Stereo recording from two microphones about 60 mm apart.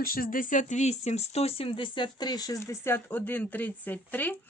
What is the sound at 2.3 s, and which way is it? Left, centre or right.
Speech, left.